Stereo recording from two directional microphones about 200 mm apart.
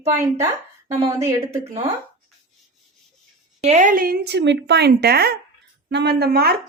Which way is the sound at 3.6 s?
40° right (ahead or behind).